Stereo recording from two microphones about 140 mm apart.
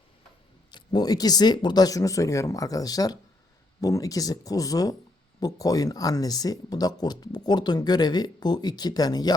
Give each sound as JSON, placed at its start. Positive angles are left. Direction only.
{"t": 0.7, "sound": "speech", "side_deg": 30}